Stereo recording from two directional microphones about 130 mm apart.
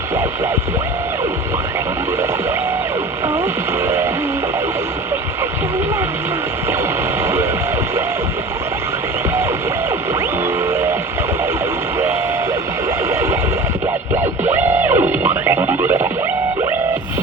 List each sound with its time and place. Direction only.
3.8 s a sound: 20° right (ahead or behind)
10.7 s vehicle: 20° right (ahead or behind)
14.4 s music: 15° right (ahead or behind)